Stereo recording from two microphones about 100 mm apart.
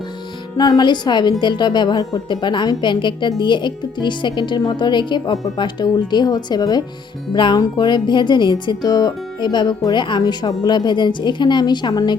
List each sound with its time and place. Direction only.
0.5 s speech: 40° left (ahead or behind)
7.3 s speech: 50° left (ahead or behind)